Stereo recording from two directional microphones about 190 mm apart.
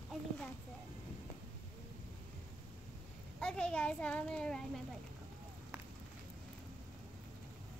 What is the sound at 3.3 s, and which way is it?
A child's voice, 5° left (ahead or behind).